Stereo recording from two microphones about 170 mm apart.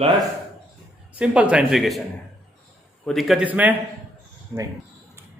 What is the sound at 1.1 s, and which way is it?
Speech, 10° right (ahead or behind).